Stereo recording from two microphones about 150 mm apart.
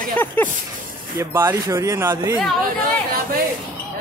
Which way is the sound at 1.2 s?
15° right (ahead or behind).